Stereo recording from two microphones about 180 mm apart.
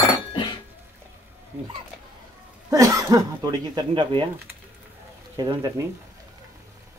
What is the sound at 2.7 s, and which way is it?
Speech, 20° right (ahead or behind).